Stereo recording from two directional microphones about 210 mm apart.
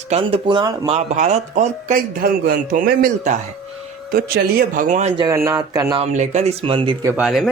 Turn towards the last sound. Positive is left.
turn(degrees=0)  # may be behind; listen again after turning